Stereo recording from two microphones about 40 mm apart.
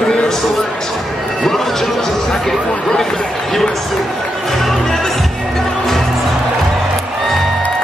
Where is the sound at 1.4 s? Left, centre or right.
Centre.